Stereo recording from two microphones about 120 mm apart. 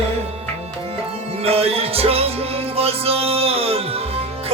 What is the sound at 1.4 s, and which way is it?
Music, 55° right (ahead or behind).